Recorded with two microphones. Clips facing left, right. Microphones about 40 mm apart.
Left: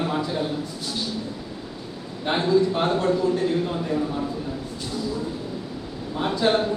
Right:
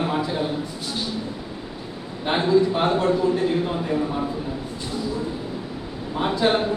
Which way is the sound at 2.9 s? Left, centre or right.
Right.